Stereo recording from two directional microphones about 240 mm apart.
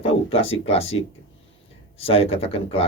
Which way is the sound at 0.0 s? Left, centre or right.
Left.